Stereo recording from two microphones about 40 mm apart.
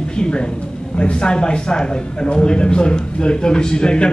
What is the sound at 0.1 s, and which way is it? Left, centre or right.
A man's voice, left.